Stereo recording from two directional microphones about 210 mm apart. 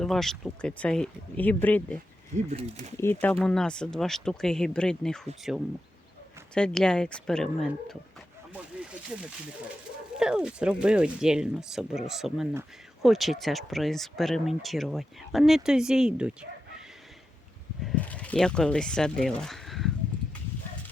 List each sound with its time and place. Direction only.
0.0 s speech: centre (ahead or behind)
2.5 s speech: 30° right (ahead or behind)
3.0 s speech: 10° left (ahead or behind)
8.5 s snake: 5° right (ahead or behind)
10.2 s speech: 5° right (ahead or behind)
17.8 s speech: 5° left (ahead or behind)